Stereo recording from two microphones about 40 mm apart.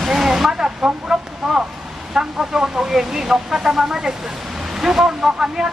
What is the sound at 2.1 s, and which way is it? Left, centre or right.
Speech, centre.